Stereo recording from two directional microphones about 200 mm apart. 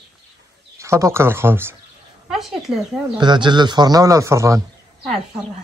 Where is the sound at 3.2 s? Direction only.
20° right (ahead or behind).